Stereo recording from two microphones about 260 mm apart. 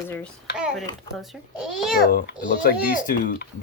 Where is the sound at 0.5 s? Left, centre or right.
Centre.